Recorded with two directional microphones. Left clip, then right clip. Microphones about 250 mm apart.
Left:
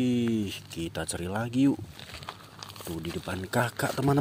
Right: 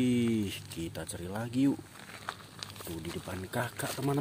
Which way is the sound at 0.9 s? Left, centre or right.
Centre.